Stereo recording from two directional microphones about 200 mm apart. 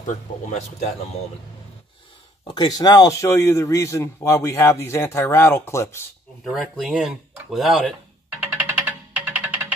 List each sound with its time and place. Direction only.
0.0 s speech: 35° left (ahead or behind)
2.4 s speech: 20° left (ahead or behind)
6.4 s speech: centre (ahead or behind)
8.4 s music: 10° right (ahead or behind)